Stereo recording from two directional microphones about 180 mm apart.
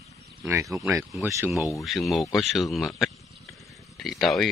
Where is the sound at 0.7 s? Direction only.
15° right (ahead or behind).